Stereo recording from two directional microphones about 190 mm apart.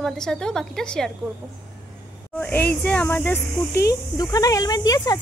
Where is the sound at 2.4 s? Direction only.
5° left (ahead or behind).